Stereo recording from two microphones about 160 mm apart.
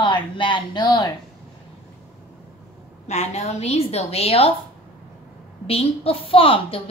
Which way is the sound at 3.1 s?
45° left (ahead or behind).